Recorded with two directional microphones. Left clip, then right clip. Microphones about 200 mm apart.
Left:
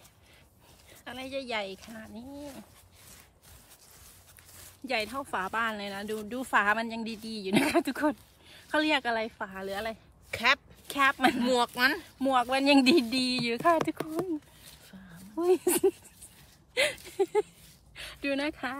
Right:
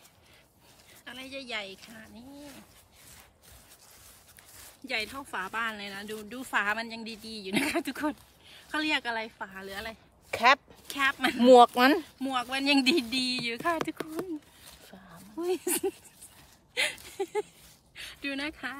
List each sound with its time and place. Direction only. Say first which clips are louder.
1.0 s a woman's voice: left 4 dB; 20° left (ahead or behind)
4.8 s speech: left 2 dB; 20° left (ahead or behind)
5.4 s a woman's voice: left 1 dB; 10° left (ahead or behind)
10.3 s speech: right 4 dB; 30° right (ahead or behind)
10.9 s a woman's voice: left 2 dB; 20° left (ahead or behind)
11.5 s speech: right 8 dB; 35° right (ahead or behind)
12.2 s a woman's voice: left 5 dB; 15° left (ahead or behind)
14.6 s a sound: right 2 dB; 25° right (ahead or behind)
15.3 s a woman's voice: left 5 dB; 15° left (ahead or behind)
16.7 s a sound: left 2 dB; 15° left (ahead or behind)
17.2 s speech: left 5 dB; 20° left (ahead or behind)